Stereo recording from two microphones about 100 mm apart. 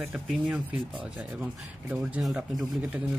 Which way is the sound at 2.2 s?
5° right (ahead or behind).